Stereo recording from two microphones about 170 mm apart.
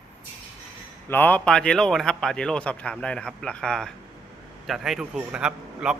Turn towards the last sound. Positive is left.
turn(degrees=-5)  # may be behind; listen again after turning